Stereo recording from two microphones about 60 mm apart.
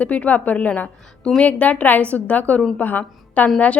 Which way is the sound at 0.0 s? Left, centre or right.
Left.